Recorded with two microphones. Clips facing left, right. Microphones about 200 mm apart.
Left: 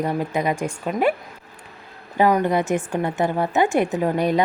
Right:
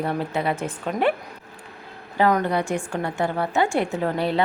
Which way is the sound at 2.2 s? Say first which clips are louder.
Left 2 dB; 15° left (ahead or behind).